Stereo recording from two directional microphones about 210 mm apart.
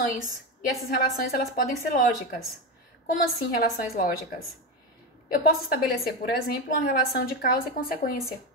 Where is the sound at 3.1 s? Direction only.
45° left (ahead or behind).